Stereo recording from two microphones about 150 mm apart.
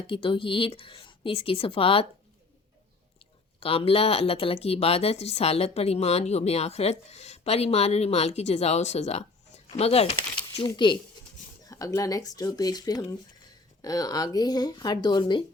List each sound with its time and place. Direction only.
0.1 s a woman's voice: 35° left (ahead or behind)
3.6 s speech: 40° left (ahead or behind)
10.5 s a woman's voice: 35° left (ahead or behind)
11.7 s speech: 20° left (ahead or behind)